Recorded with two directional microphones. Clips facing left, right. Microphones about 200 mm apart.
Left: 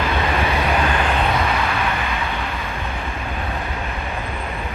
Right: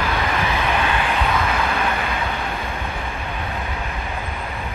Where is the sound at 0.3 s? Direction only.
30° left (ahead or behind).